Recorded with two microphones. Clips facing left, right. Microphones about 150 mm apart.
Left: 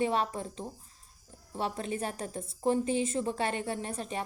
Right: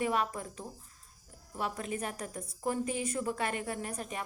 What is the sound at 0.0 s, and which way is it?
A woman's voice, 30° left (ahead or behind).